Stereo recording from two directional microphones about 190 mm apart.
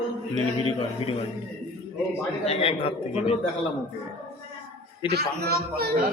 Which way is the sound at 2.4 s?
30° left (ahead or behind).